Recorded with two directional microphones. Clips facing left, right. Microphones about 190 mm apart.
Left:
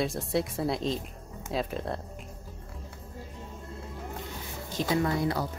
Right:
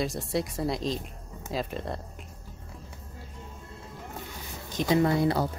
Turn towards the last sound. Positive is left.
turn(degrees=-25)  # may be behind; listen again after turning